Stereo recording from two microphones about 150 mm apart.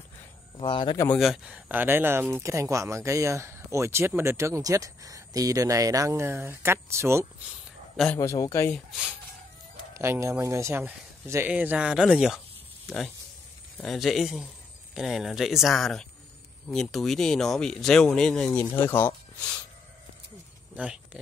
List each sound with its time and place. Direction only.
0.6 s speech: 35° left (ahead or behind)
0.9 s speech: 10° left (ahead or behind)
1.2 s speech: 5° right (ahead or behind)
8.2 s speech: 20° left (ahead or behind)
8.7 s speech: 5° right (ahead or behind)
9.9 s a man's voice: 20° right (ahead or behind)
13.7 s speech: centre (ahead or behind)
20.7 s speech: 5° right (ahead or behind)